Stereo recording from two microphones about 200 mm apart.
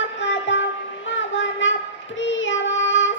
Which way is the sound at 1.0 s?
65° left (ahead or behind).